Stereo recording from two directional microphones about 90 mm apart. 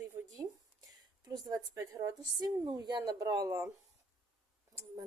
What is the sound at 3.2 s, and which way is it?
Speech, 35° right (ahead or behind).